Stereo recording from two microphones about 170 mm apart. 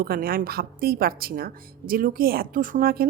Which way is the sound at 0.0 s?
60° right (ahead or behind).